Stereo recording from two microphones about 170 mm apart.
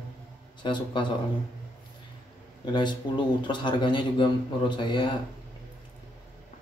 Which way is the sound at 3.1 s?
25° left (ahead or behind).